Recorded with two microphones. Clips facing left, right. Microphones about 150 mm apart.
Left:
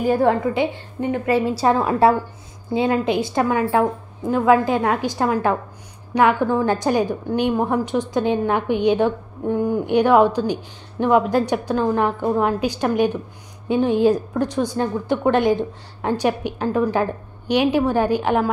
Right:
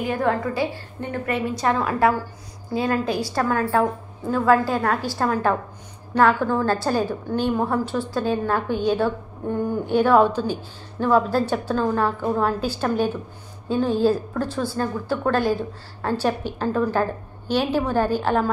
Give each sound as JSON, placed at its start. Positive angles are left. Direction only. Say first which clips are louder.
{"t": 0.0, "sound": "a woman's voice", "louder": "left 5 dB", "side_deg": 35}
{"t": 0.6, "sound": "a woman's voice", "louder": "left 4 dB", "side_deg": 20}